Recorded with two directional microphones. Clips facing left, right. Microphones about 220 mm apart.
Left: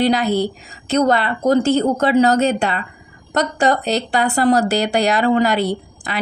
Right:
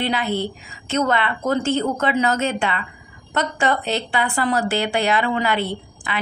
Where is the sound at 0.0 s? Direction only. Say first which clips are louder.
Left 6 dB; 40° left (ahead or behind).